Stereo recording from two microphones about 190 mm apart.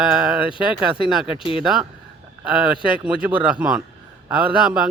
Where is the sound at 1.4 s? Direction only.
30° left (ahead or behind).